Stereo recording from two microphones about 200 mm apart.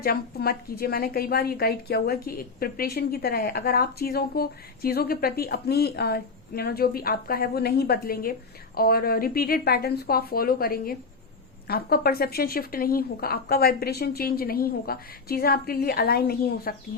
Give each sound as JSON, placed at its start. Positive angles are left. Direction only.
{"t": 0.0, "sound": "a woman's voice", "side_deg": 50}